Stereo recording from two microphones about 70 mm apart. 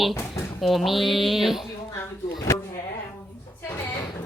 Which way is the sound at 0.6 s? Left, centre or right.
Centre.